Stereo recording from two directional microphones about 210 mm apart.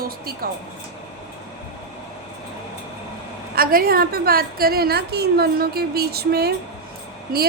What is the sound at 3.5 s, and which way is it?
A woman's voice, 45° right (ahead or behind).